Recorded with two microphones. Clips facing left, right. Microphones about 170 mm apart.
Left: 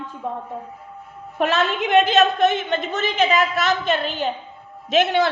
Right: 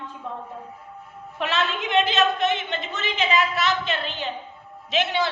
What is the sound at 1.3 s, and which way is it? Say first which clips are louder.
A woman's voice: left 5 dB; 45° left (ahead or behind).